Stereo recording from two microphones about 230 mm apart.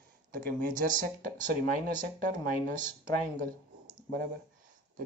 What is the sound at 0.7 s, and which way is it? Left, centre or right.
Speech, right.